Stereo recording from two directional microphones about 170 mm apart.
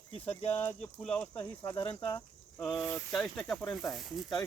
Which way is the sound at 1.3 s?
25° left (ahead or behind).